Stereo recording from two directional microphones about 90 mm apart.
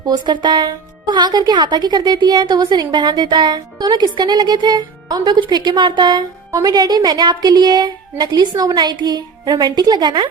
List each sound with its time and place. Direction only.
0.0 s speech: 55° right (ahead or behind)
6.5 s speech: 45° right (ahead or behind)